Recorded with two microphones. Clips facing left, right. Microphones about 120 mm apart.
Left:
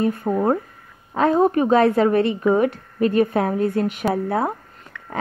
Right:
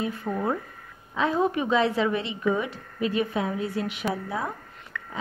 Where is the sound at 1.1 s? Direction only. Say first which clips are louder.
Left 7 dB; 50° left (ahead or behind).